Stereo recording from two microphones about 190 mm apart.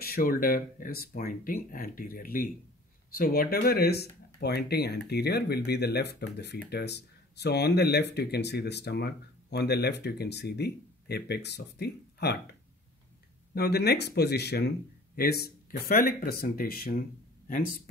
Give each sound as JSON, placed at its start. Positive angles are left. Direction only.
{"t": 0.0, "sound": "speech", "side_deg": 50}
{"t": 13.6, "sound": "speech", "side_deg": 60}